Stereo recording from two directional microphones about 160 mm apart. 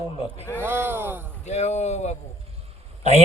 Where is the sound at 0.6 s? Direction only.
15° right (ahead or behind).